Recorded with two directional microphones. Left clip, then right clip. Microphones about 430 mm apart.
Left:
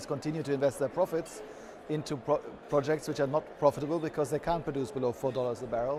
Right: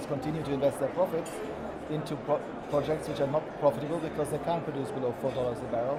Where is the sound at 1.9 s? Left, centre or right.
Left.